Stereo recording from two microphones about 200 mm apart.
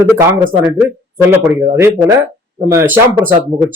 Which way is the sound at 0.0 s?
10° right (ahead or behind).